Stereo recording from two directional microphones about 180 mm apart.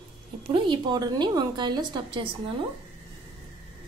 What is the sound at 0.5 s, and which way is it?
A woman's voice, 25° right (ahead or behind).